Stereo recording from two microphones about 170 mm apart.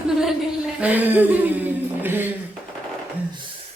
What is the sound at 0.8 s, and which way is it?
A woman's voice, 10° right (ahead or behind).